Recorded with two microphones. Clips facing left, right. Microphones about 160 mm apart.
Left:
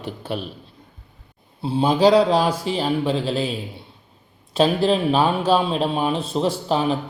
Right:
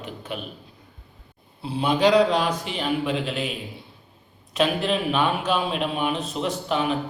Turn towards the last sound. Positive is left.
turn(degrees=35)  # may be behind; listen again after turning